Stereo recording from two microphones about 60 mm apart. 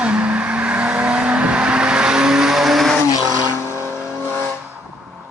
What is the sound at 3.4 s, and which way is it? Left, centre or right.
Vehicle, right.